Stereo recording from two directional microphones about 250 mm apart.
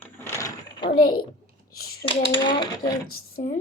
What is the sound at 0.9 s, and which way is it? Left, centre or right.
Speech, left.